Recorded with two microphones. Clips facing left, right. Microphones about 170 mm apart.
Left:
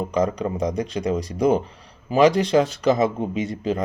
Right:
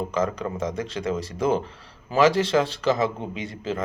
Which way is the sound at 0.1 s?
15° left (ahead or behind).